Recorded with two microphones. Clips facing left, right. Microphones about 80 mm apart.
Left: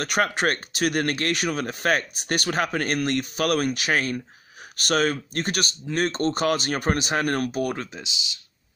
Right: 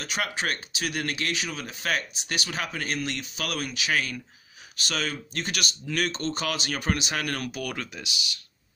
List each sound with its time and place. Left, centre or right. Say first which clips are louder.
0.0 s speech: left 7 dB; left
7.7 s speech: left 3 dB; left